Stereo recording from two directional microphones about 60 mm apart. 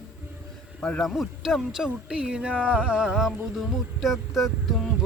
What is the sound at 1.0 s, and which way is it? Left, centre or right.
Speech, centre.